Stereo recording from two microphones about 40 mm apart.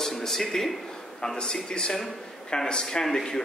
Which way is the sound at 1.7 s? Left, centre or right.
Centre.